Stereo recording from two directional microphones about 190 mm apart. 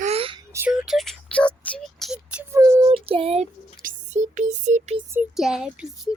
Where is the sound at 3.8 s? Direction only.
45° right (ahead or behind).